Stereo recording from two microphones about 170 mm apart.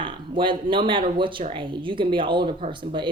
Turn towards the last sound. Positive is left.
turn(degrees=-30)  # may be behind; listen again after turning